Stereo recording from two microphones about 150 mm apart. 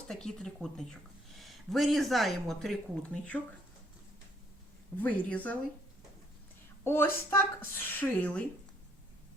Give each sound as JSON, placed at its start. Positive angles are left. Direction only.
{"t": 0.1, "sound": "speech", "side_deg": 5}
{"t": 4.9, "sound": "a woman's voice", "side_deg": 10}
{"t": 6.8, "sound": "a woman's voice", "side_deg": 15}